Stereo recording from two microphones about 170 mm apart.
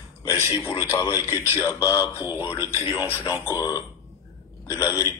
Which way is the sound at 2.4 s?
30° left (ahead or behind).